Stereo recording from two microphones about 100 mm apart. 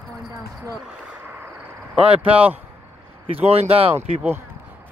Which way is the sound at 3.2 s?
80° right.